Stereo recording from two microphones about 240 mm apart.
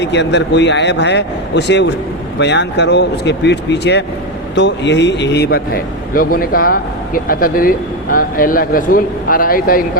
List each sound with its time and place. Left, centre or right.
0.0 s a man's voice: left